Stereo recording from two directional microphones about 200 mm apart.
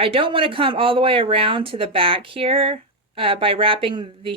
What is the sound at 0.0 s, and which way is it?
Speech, 25° right (ahead or behind).